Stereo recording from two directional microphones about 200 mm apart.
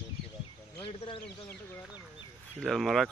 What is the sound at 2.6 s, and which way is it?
Speech, centre (ahead or behind).